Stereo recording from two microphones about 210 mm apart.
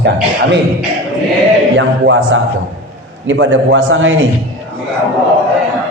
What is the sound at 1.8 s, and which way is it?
A man's voice, 60° right (ahead or behind).